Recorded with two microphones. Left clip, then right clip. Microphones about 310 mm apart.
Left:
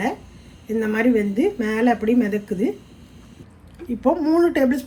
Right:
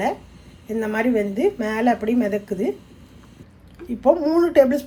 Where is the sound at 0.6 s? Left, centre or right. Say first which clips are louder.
Left 2 dB; right.